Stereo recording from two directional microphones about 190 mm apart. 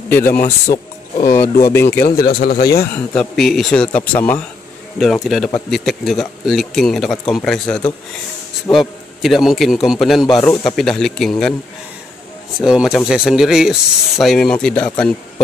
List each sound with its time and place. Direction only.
0.2 s speech: 50° left (ahead or behind)
1.2 s speech: 15° left (ahead or behind)
2.0 s speech: 50° left (ahead or behind)
2.9 s speech: 5° left (ahead or behind)
10.2 s speech: 20° left (ahead or behind)
10.6 s speech: centre (ahead or behind)
12.5 s a man's voice: centre (ahead or behind)